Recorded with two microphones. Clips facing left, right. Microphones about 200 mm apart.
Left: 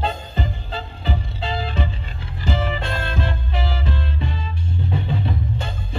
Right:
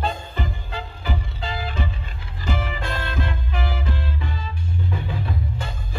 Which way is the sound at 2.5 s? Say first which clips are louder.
Left 5 dB; 30° left (ahead or behind).